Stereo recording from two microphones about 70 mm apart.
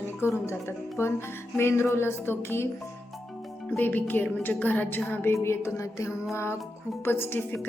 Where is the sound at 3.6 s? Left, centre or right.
Left.